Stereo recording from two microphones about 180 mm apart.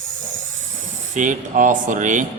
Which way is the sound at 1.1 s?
45° right (ahead or behind).